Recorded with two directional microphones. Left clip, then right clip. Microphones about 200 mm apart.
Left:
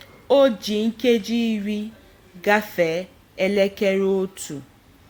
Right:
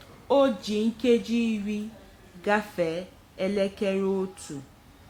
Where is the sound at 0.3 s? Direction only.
15° left (ahead or behind).